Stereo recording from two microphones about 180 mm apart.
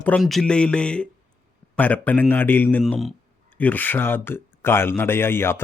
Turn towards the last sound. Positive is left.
turn(degrees=15)  # may be behind; listen again after turning